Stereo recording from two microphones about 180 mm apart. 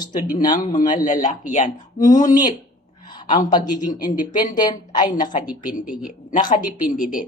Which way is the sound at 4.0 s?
45° left (ahead or behind).